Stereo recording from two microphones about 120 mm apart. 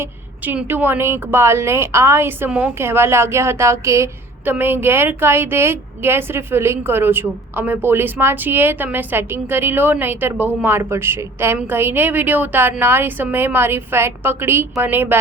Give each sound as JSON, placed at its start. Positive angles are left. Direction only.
{"t": 0.0, "sound": "a woman's voice", "side_deg": -15}
{"t": 2.5, "sound": "a woman's voice", "side_deg": -10}
{"t": 2.7, "sound": "a woman's voice", "side_deg": -20}